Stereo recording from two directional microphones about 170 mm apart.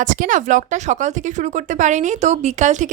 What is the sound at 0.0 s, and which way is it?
A woman's voice, 50° right (ahead or behind).